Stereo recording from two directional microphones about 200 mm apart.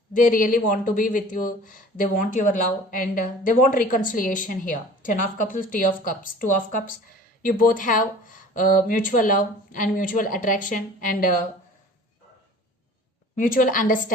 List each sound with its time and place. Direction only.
0.1 s speech: 40° left (ahead or behind)
13.3 s speech: 45° left (ahead or behind)